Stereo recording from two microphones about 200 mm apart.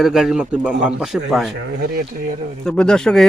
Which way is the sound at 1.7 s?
50° right (ahead or behind).